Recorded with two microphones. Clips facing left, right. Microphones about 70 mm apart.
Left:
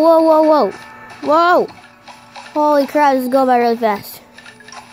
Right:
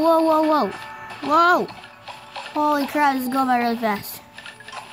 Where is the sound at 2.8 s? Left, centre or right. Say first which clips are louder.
Left 7 dB; left.